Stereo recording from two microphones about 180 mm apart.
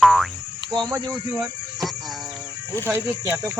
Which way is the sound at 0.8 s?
20° right (ahead or behind).